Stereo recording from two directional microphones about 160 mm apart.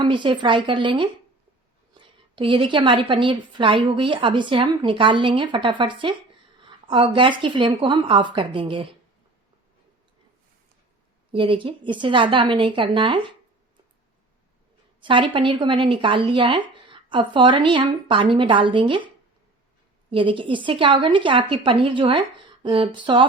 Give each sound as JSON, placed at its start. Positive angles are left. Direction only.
{"t": 0.0, "sound": "a woman's voice", "side_deg": -30}
{"t": 11.3, "sound": "a woman's voice", "side_deg": -35}
{"t": 15.0, "sound": "a woman's voice", "side_deg": -30}
{"t": 20.1, "sound": "a woman's voice", "side_deg": -30}